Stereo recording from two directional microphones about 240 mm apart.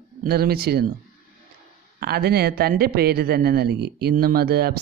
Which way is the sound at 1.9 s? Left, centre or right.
Right.